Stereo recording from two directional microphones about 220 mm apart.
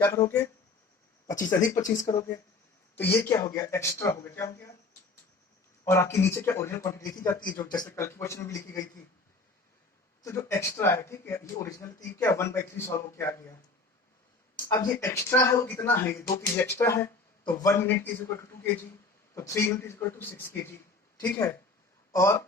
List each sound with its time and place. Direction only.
0.0 s speech: 15° left (ahead or behind)
5.8 s speech: 10° left (ahead or behind)
10.2 s speech: 10° left (ahead or behind)
14.7 s a man's voice: 15° left (ahead or behind)